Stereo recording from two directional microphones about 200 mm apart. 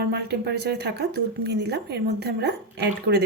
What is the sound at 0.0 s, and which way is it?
Speech, 55° right (ahead or behind).